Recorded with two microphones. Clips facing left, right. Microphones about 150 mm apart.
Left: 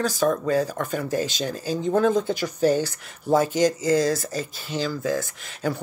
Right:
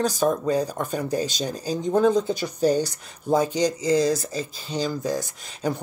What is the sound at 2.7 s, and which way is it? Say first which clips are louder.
Speech: even; 15° right (ahead or behind).